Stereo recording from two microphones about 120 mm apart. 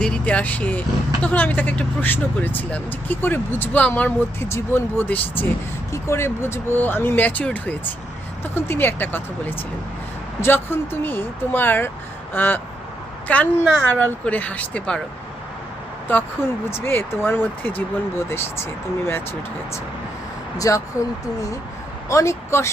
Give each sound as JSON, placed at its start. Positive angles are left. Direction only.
{"t": 0.0, "sound": "speech", "side_deg": 10}
{"t": 10.4, "sound": "speech", "side_deg": 20}
{"t": 16.6, "sound": "speech", "side_deg": 20}
{"t": 20.6, "sound": "speech", "side_deg": 25}
{"t": 22.1, "sound": "speech", "side_deg": 25}